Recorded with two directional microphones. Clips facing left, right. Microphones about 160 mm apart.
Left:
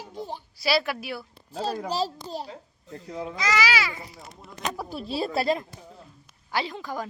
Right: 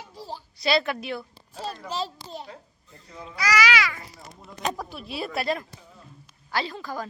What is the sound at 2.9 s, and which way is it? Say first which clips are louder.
Speech: left 9 dB; 70° left (ahead or behind).